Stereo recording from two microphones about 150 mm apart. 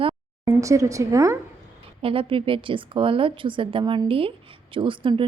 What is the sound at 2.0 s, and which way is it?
A woman's voice, 40° right (ahead or behind).